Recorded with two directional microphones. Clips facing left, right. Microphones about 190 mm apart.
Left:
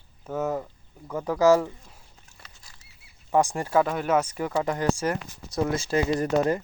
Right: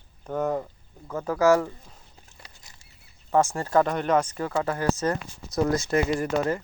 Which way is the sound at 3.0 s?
15° left (ahead or behind).